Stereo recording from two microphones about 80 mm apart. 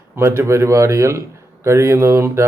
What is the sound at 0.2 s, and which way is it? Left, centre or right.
Speech, right.